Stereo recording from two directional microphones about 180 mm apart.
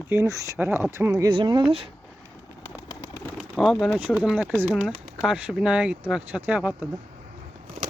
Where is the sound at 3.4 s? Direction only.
Centre (ahead or behind).